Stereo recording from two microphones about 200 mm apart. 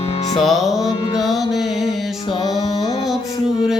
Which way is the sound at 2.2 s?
25° left (ahead or behind).